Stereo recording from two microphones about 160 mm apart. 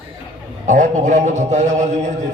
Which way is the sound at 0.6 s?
55° right (ahead or behind).